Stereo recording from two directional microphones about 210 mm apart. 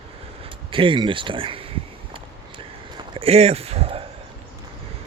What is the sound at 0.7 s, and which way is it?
Speech, 25° right (ahead or behind).